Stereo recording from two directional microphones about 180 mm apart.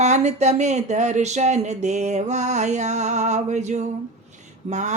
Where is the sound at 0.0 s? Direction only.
40° right (ahead or behind).